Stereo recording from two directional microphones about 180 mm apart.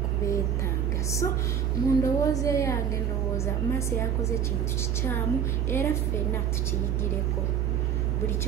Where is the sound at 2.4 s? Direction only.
15° left (ahead or behind).